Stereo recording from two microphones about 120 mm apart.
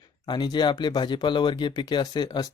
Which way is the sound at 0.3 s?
40° left (ahead or behind).